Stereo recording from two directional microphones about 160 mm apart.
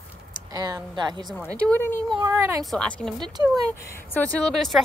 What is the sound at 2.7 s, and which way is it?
Speech, 5° left (ahead or behind).